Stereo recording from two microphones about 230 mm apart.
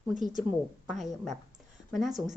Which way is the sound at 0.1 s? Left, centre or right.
Right.